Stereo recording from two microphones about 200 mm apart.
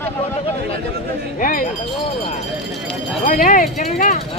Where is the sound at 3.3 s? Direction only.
45° left (ahead or behind).